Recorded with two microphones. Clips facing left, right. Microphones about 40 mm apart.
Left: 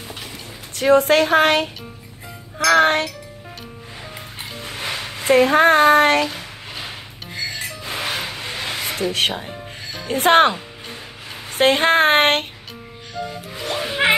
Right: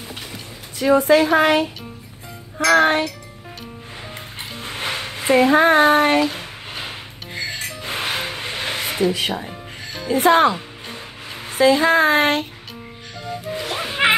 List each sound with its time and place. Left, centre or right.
0.7 s a woman's voice: left
4.6 s music: right
4.9 s a sound: right
5.5 s a woman's voice: left
7.3 s music: right
8.1 s a sound: right
9.1 s a woman's voice: left
11.5 s speech: left
13.7 s music: centre